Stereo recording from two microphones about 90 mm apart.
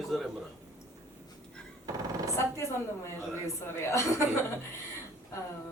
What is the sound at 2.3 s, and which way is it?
A woman's voice, 30° left (ahead or behind).